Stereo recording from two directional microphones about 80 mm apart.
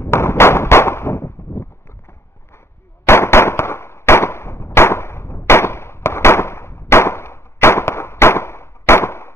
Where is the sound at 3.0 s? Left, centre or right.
Left.